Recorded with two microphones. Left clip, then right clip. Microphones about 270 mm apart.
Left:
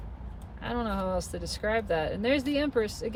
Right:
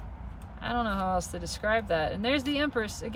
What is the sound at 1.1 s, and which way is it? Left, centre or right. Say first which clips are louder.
Speech: right 1 dB; right.